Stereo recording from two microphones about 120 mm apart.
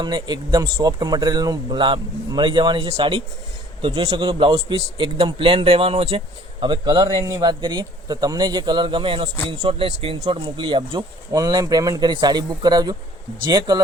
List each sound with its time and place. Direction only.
0.0 s a man's voice: 35° right (ahead or behind); by 6.2 s 55° right (ahead or behind)
6.6 s a man's voice: 40° right (ahead or behind)
11.3 s a man's voice: 30° right (ahead or behind)